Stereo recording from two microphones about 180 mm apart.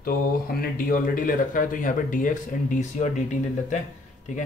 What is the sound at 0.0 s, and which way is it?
Speech, 55° left (ahead or behind).